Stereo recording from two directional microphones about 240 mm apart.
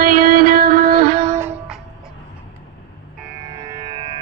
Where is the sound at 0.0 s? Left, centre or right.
Right.